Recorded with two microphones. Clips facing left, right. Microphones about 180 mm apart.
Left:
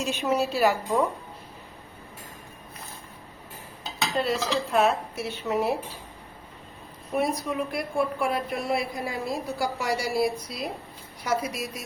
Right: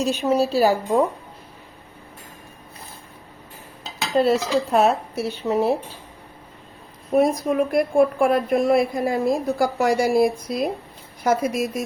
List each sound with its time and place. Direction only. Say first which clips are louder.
0.0 s speech: right 6 dB; 35° right (ahead or behind)
4.1 s speech: right 8 dB; 40° right (ahead or behind)
7.2 s a woman's voice: right 8 dB; 50° right (ahead or behind)